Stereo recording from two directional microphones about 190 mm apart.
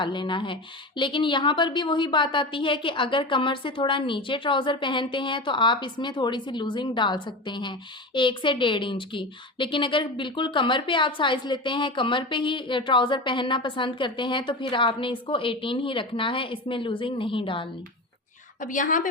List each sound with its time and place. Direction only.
0.0 s speech: 25° left (ahead or behind)
18.6 s a woman's voice: 45° left (ahead or behind)